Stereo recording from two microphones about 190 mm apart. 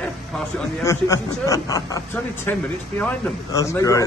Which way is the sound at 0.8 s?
15° left (ahead or behind).